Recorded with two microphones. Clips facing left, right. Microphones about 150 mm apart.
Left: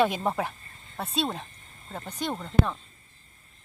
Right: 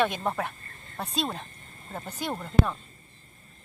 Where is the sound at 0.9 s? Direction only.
Centre (ahead or behind).